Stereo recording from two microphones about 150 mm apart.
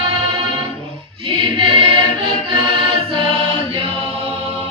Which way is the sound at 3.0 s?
35° right (ahead or behind).